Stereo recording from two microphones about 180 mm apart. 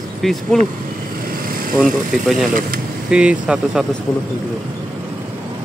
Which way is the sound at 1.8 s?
Centre (ahead or behind).